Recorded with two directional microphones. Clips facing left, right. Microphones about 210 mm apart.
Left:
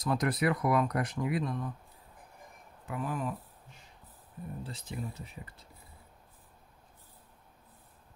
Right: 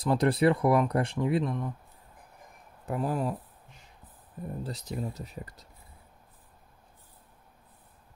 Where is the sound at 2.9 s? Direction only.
35° right (ahead or behind).